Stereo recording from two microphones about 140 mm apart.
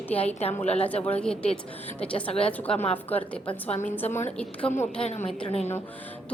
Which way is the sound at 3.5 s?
45° left (ahead or behind).